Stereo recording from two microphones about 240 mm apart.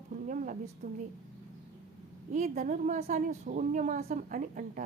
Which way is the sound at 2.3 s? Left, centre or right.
Right.